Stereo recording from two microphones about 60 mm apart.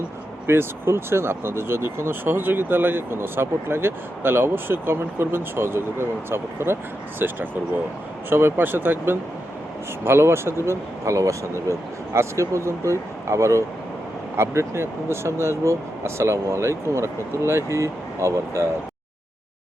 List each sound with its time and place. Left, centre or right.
0.4 s speech: right